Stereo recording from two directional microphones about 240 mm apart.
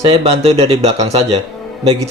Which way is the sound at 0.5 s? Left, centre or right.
Right.